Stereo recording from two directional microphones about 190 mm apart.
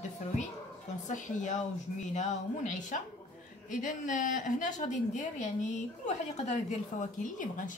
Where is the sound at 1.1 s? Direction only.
40° left (ahead or behind).